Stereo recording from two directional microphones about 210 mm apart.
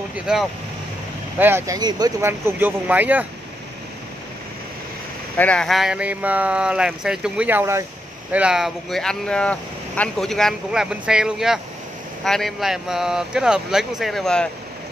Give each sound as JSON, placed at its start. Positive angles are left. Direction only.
{"t": 1.4, "sound": "speech", "side_deg": -15}
{"t": 5.4, "sound": "speech", "side_deg": 5}